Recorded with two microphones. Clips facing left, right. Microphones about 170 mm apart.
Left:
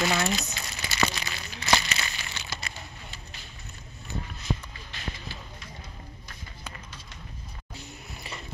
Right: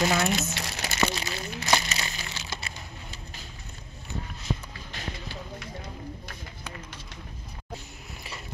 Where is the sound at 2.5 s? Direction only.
25° right (ahead or behind).